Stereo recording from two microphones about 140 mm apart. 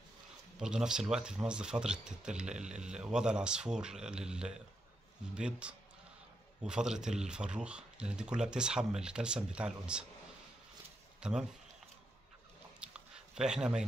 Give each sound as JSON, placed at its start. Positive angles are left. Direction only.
{"t": 0.6, "sound": "speech", "side_deg": -5}
{"t": 11.1, "sound": "speech", "side_deg": -5}
{"t": 12.8, "sound": "a sound", "side_deg": -5}